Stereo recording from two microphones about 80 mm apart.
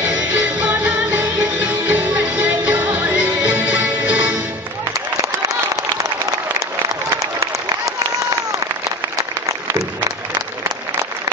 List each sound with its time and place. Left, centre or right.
0.0 s music: centre
7.2 s applause: right